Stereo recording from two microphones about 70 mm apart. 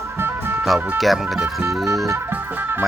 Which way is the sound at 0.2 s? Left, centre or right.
Right.